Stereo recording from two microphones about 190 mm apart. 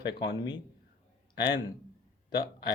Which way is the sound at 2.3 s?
20° left (ahead or behind).